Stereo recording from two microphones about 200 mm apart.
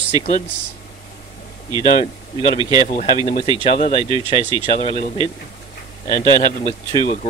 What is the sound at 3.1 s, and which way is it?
Speech, 30° left (ahead or behind).